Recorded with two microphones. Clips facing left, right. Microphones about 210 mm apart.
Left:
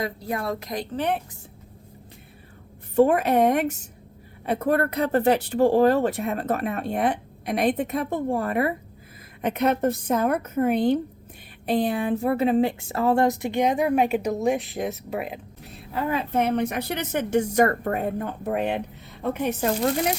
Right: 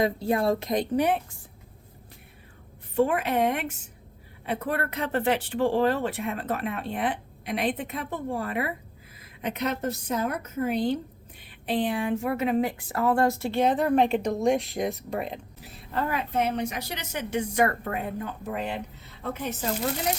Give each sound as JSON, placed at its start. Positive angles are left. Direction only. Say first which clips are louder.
{"t": 0.0, "sound": "a woman's voice", "louder": "right 4 dB", "side_deg": -25}
{"t": 2.9, "sound": "a woman's voice", "louder": "left 5 dB", "side_deg": 40}
{"t": 11.6, "sound": "speech", "louder": "left 3 dB", "side_deg": 40}
{"t": 16.3, "sound": "a woman's voice", "louder": "left 6 dB", "side_deg": 55}